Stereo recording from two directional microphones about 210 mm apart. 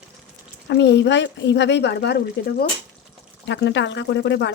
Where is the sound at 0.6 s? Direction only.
55° left (ahead or behind).